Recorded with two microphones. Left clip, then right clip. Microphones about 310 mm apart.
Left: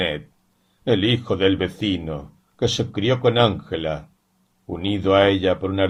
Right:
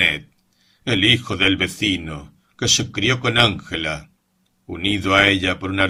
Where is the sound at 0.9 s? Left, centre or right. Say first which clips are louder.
Right 3 dB; right.